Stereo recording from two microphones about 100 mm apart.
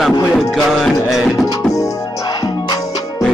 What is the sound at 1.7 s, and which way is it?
Music, 40° left (ahead or behind).